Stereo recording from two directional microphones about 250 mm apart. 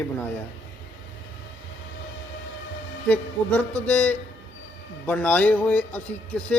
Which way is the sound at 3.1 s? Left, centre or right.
Centre.